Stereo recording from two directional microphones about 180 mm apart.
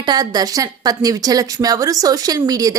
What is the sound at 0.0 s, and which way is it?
A woman's voice, 25° right (ahead or behind).